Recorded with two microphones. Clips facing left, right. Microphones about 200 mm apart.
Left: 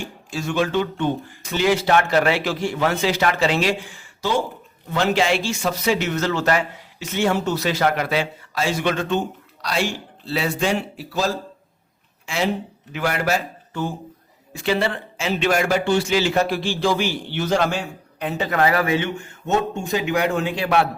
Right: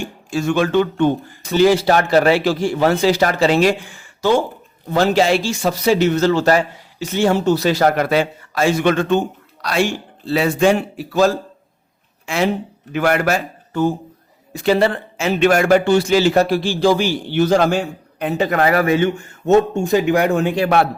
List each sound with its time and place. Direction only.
0.3 s a man's voice: 55° right (ahead or behind)
1.5 s a man's voice: 35° right (ahead or behind); by 4.4 s 50° right (ahead or behind)
4.9 s a man's voice: 40° right (ahead or behind); by 13.8 s 55° right (ahead or behind)
14.5 s a man's voice: 40° right (ahead or behind)